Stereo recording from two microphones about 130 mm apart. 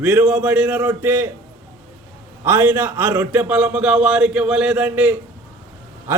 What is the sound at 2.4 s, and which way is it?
A man's voice, 15° right (ahead or behind).